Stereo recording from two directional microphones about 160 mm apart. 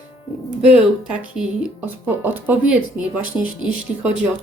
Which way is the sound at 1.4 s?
5° right (ahead or behind).